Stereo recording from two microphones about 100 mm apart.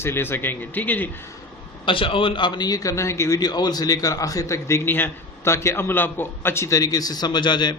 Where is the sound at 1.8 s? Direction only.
60° left (ahead or behind).